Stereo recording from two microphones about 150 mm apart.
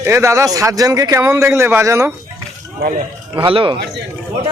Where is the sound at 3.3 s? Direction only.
35° right (ahead or behind).